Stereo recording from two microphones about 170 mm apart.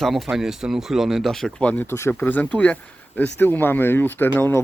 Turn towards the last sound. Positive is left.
turn(degrees=10)  # may be behind; listen again after turning